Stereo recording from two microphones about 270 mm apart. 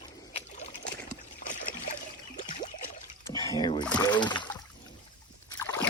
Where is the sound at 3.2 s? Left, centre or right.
Centre.